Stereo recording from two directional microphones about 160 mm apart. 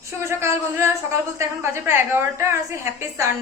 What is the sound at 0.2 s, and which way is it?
A woman's voice, 15° right (ahead or behind).